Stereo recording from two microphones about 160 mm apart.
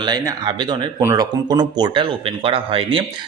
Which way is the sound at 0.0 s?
25° right (ahead or behind).